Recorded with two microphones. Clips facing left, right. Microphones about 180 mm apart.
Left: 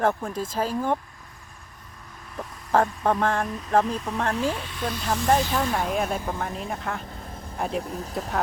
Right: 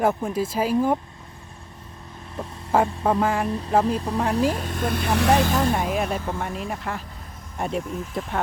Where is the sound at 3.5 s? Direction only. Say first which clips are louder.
Right 2 dB; 30° right (ahead or behind); by 5.5 s 70° right (ahead or behind).